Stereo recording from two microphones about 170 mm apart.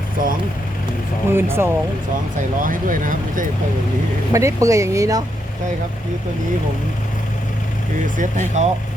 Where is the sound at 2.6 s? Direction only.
55° right (ahead or behind).